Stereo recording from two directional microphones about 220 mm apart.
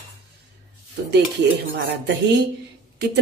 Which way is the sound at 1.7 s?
50° right (ahead or behind).